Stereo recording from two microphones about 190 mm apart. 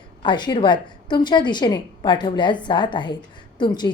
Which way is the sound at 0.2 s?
25° left (ahead or behind).